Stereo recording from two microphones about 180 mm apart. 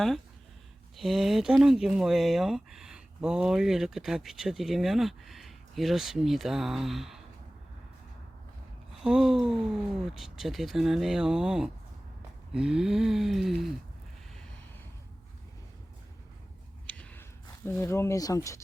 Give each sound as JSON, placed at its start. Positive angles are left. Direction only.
{"t": 0.9, "sound": "speech", "side_deg": 0}
{"t": 9.0, "sound": "speech", "side_deg": -5}
{"t": 16.8, "sound": "a sound", "side_deg": 5}
{"t": 17.7, "sound": "speech", "side_deg": 15}